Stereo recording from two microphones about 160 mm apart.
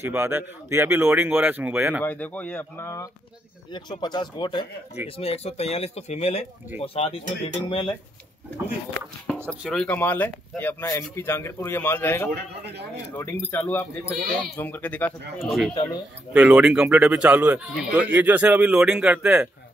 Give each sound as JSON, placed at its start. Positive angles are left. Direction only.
{"t": 0.0, "sound": "speech", "side_deg": -15}
{"t": 2.0, "sound": "speech", "side_deg": 10}
{"t": 9.6, "sound": "speech", "side_deg": 5}
{"t": 12.3, "sound": "speech", "side_deg": -90}
{"t": 13.1, "sound": "speech", "side_deg": 15}
{"t": 15.4, "sound": "speech", "side_deg": 0}